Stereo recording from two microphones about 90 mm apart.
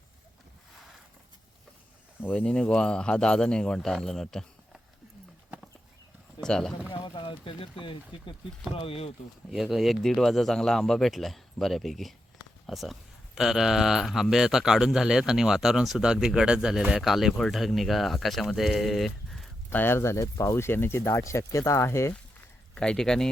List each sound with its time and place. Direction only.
2.2 s speech: 15° left (ahead or behind)
6.4 s speech: 5° left (ahead or behind)
7.0 s speech: 65° left (ahead or behind)
8.7 s speech: 90° left
9.5 s speech: 5° right (ahead or behind)
19.7 s speech: 25° left (ahead or behind)
22.7 s speech: 10° left (ahead or behind)